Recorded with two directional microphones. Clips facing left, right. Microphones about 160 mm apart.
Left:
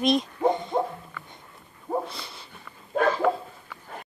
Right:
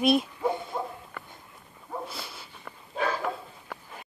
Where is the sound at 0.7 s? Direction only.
50° left (ahead or behind).